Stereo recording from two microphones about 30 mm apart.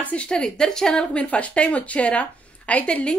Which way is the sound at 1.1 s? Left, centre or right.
Left.